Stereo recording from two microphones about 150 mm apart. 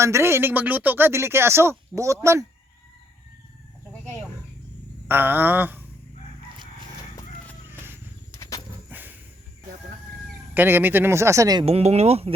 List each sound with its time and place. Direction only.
0.0 s speech: 20° right (ahead or behind)
5.0 s speech: 15° right (ahead or behind)
7.7 s a sound: 15° right (ahead or behind)
8.3 s roaring cats: 20° left (ahead or behind)
8.9 s a sound: 10° right (ahead or behind)
10.5 s speech: 15° right (ahead or behind)
11.6 s speech: 45° right (ahead or behind)